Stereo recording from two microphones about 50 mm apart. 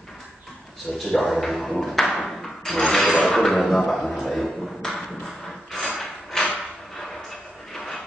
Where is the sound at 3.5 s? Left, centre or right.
Left.